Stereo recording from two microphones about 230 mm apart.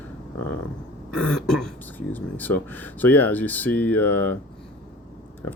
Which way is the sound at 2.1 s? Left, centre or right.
Centre.